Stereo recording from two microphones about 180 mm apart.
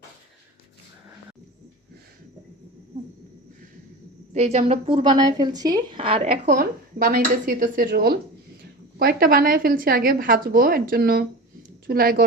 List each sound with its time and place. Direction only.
2.9 s owl: 45° right (ahead or behind)
4.4 s a woman's voice: 35° right (ahead or behind)
6.3 s a woman's voice: 50° right (ahead or behind)